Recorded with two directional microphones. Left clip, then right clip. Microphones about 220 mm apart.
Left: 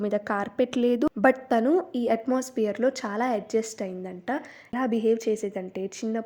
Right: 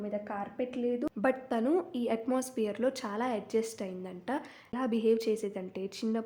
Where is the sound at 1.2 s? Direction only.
25° left (ahead or behind).